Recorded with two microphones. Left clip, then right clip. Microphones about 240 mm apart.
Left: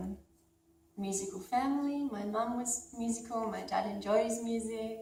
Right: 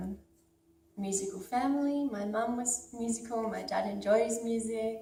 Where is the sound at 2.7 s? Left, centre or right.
Right.